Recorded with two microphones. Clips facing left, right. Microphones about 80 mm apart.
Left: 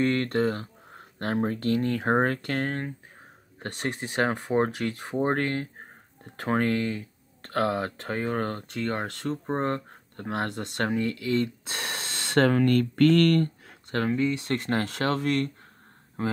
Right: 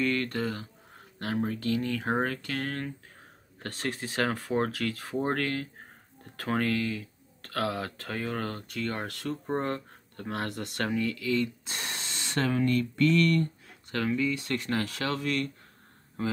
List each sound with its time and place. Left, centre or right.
0.0 s speech: left
3.5 s speech: left